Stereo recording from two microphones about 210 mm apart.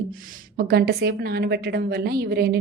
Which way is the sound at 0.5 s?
50° right (ahead or behind).